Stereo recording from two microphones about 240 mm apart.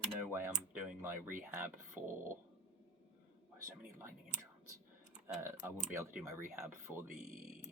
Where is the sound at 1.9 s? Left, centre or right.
Right.